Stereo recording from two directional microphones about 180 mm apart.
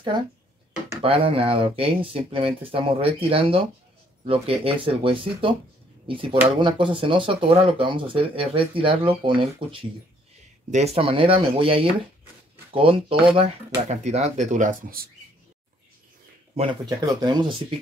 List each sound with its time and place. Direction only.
1.0 s speech: 30° right (ahead or behind)
6.6 s speech: 30° right (ahead or behind); by 15.0 s 50° right (ahead or behind)
16.5 s speech: 25° right (ahead or behind)